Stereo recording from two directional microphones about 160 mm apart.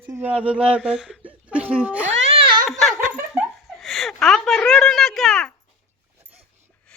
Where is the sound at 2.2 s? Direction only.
35° right (ahead or behind).